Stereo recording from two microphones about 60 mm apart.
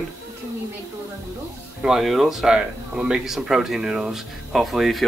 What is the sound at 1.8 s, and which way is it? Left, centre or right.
Speech, centre.